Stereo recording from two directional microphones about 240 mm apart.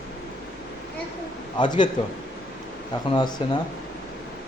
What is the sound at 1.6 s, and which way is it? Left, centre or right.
Speech, centre.